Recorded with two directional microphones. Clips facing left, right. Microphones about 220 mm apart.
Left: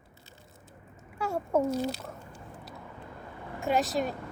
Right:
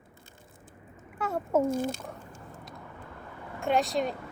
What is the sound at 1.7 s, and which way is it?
Speech, 50° right (ahead or behind).